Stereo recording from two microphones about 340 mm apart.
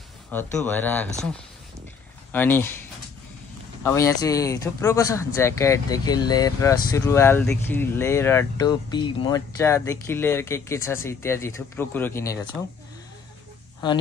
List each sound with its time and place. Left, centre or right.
0.3 s speech: centre
2.3 s speech: centre
3.8 s speech: centre